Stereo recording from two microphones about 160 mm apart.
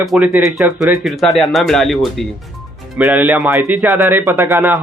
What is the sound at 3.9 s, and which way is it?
Speech, 15° right (ahead or behind).